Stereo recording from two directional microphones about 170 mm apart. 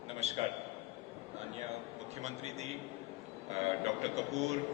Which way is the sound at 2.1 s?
40° right (ahead or behind).